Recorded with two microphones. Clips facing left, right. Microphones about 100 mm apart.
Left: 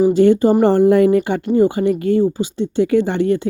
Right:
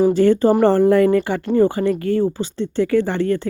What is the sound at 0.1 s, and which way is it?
Speech, 20° left (ahead or behind).